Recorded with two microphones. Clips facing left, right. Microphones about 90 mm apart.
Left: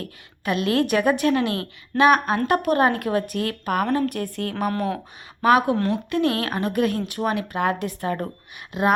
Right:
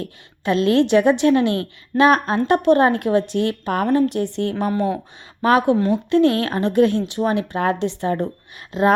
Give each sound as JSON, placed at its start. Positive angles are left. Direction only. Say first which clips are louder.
{"t": 0.0, "sound": "a woman's voice", "louder": "right 4 dB", "side_deg": -30}